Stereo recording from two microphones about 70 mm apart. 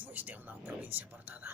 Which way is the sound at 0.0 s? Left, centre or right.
Right.